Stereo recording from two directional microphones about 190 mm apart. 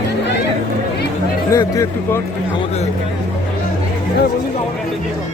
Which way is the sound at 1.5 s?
15° left (ahead or behind).